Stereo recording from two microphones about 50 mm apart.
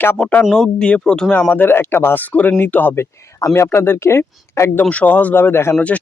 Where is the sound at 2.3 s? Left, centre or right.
Left.